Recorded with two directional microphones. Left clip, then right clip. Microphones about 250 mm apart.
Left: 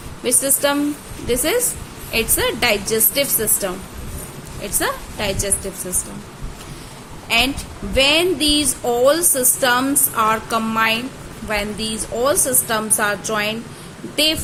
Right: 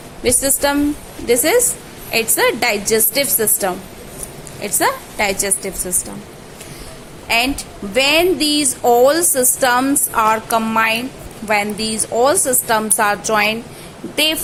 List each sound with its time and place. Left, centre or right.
0.2 s speech: centre
7.3 s a woman's voice: centre